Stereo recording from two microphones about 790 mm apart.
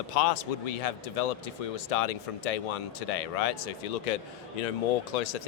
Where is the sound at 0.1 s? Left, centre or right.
Left.